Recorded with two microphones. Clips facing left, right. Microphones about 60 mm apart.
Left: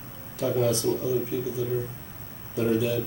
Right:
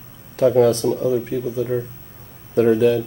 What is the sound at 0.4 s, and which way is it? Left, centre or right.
Speech, right.